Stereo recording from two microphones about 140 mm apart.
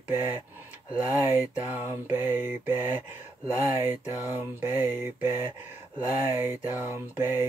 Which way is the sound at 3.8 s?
15° right (ahead or behind).